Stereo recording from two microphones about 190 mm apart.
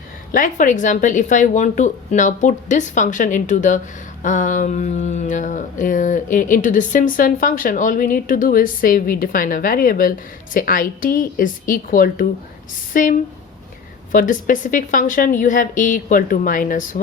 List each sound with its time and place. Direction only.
0.3 s speech: 45° left (ahead or behind)